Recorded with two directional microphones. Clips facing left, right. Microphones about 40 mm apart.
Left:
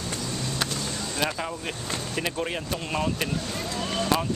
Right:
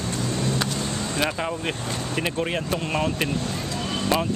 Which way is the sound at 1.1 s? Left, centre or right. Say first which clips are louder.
Right 3 dB; right.